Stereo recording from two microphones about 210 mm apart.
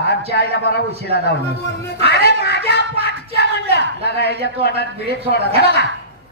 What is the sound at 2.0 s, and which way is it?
Speech, 50° left (ahead or behind).